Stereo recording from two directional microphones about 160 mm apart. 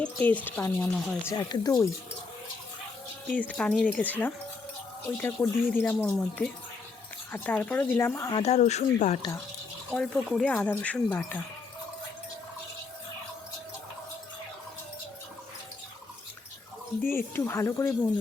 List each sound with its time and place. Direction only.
0.0 s speech: 10° left (ahead or behind)
1.3 s speech: 25° left (ahead or behind)
3.2 s speech: 5° left (ahead or behind)
8.3 s speech: 40° left (ahead or behind)
9.9 s speech: 5° left (ahead or behind)
17.0 s speech: 15° left (ahead or behind)